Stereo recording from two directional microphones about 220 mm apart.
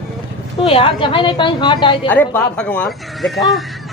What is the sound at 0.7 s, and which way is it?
A woman's voice, 25° left (ahead or behind).